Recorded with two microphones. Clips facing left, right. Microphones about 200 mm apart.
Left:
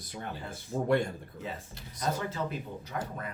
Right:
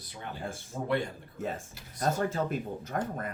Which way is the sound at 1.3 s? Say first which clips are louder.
Right 4 dB; 45° right (ahead or behind).